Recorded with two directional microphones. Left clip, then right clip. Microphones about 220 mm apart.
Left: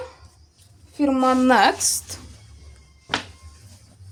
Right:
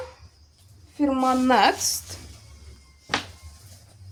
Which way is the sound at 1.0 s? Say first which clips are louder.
Left 3 dB; 30° left (ahead or behind).